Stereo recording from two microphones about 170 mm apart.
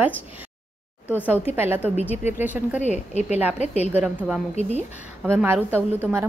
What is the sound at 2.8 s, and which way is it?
A woman's voice, 40° left (ahead or behind).